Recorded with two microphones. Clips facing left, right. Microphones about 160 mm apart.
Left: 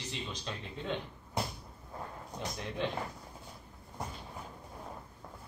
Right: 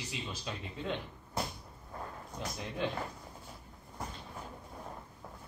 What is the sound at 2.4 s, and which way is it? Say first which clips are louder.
Speech: left 1 dB; centre (ahead or behind).